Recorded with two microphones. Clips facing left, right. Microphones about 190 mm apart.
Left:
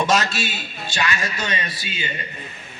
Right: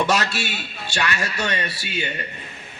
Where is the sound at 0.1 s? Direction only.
65° right (ahead or behind).